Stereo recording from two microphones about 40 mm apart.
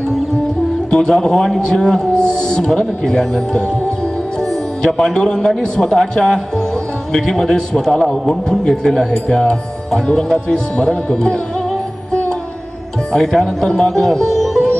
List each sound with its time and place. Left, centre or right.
0.8 s a man's voice: centre
4.8 s a man's voice: centre
10.8 s speech: left
13.1 s a man's voice: centre
13.7 s sitar: centre